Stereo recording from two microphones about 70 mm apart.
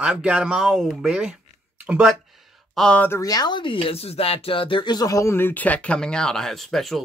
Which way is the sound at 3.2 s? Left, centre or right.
Left.